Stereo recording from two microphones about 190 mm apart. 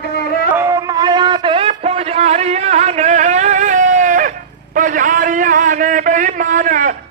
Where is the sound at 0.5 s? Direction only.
15° right (ahead or behind).